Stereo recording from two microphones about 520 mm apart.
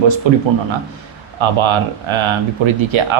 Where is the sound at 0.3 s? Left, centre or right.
Right.